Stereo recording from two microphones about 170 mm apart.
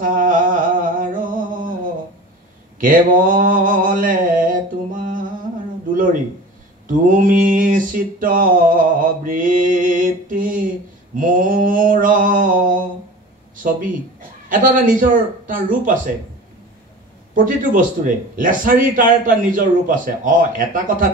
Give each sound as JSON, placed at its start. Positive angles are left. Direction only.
{"t": 0.0, "sound": "a sound", "side_deg": -50}
{"t": 2.8, "sound": "mantra", "side_deg": -55}
{"t": 6.9, "sound": "mantra", "side_deg": -50}
{"t": 14.5, "sound": "a man's voice", "side_deg": -55}
{"t": 17.5, "sound": "a man's voice", "side_deg": -55}